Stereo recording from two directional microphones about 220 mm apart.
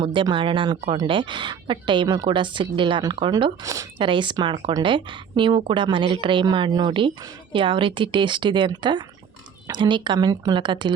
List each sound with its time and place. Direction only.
0.0 s speech: 20° right (ahead or behind)